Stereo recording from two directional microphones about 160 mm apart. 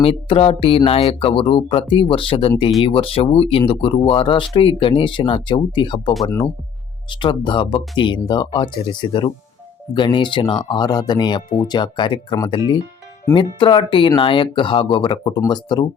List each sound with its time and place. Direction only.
0.0 s speech: 35° left (ahead or behind)